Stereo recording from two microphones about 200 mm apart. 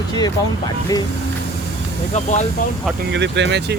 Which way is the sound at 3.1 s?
60° right (ahead or behind).